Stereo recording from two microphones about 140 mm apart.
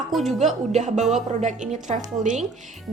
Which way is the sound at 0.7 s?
55° right (ahead or behind).